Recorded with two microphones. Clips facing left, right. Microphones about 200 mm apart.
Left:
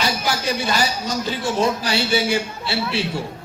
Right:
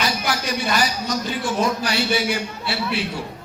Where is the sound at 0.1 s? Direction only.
25° left (ahead or behind).